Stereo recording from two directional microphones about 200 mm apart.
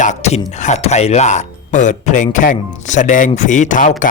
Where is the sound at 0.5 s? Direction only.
35° left (ahead or behind).